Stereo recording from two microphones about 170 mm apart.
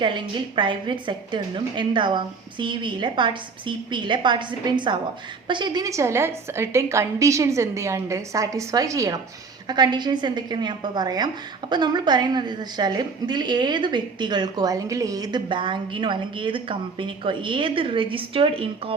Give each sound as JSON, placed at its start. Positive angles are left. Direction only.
{"t": 0.0, "sound": "a woman's voice", "side_deg": -30}